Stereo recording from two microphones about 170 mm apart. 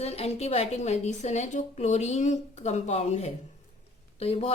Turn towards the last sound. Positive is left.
turn(degrees=35)  # may be behind; listen again after turning